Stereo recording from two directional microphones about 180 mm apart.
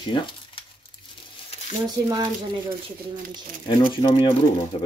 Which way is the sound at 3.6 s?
30° left (ahead or behind).